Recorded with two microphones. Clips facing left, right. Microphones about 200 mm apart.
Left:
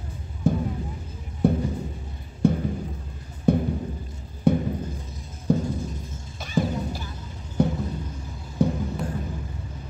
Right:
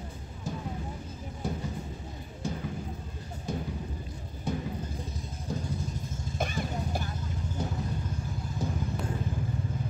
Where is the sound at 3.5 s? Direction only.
60° left (ahead or behind).